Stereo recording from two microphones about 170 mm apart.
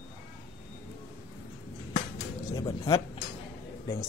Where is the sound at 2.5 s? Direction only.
20° left (ahead or behind).